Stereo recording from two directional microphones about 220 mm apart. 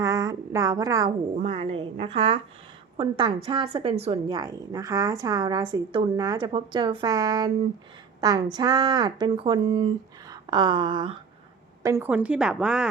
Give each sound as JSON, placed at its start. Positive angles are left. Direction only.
{"t": 0.0, "sound": "a sound", "side_deg": -15}
{"t": 1.4, "sound": "a woman's voice", "side_deg": -25}
{"t": 11.8, "sound": "a woman's voice", "side_deg": -15}